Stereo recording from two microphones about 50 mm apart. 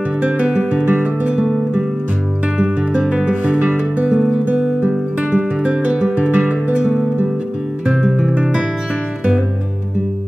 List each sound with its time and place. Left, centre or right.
0.2 s music: right
2.5 s music: right
8.1 s guitar: centre